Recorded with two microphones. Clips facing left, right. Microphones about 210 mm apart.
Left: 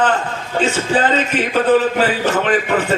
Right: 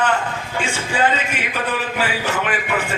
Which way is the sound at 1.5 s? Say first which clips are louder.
Left 13 dB; 40° left (ahead or behind).